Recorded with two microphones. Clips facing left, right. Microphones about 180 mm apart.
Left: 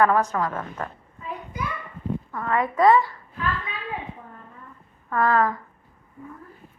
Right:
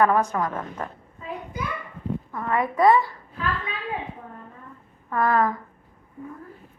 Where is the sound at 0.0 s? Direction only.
15° right (ahead or behind).